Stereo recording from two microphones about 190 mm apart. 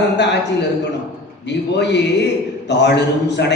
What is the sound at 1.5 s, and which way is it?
A man's voice, 65° left (ahead or behind).